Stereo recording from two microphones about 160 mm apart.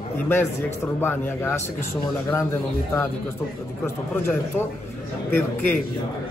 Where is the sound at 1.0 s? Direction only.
15° left (ahead or behind).